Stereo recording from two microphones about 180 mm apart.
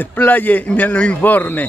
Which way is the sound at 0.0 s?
10° left (ahead or behind).